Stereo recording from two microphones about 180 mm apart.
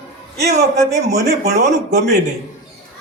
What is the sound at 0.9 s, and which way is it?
A man's voice, 40° right (ahead or behind).